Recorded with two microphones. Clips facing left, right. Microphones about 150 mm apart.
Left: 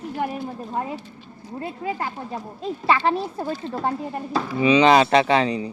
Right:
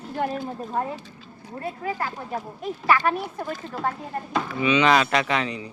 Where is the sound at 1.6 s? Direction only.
25° left (ahead or behind).